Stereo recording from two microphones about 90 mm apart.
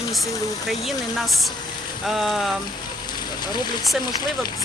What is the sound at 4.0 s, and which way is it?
Speech, 50° left (ahead or behind).